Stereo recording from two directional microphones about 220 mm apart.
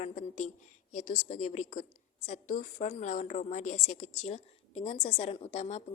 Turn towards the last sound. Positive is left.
turn(degrees=30)  # may be behind; listen again after turning